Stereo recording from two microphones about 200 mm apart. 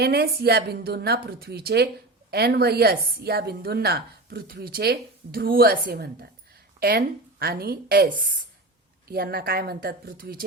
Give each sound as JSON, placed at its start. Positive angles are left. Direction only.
{"t": 0.0, "sound": "a woman's voice", "side_deg": -55}